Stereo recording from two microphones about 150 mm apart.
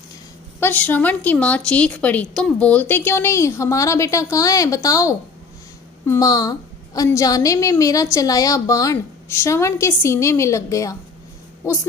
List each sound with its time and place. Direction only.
0.6 s a woman's voice: 10° left (ahead or behind)